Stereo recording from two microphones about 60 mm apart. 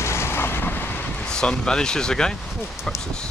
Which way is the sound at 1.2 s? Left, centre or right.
Centre.